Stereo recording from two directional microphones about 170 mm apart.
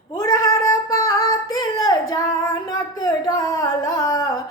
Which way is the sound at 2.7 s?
20° left (ahead or behind).